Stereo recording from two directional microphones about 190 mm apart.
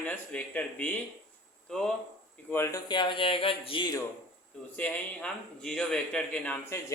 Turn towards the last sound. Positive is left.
turn(degrees=5)  # may be behind; listen again after turning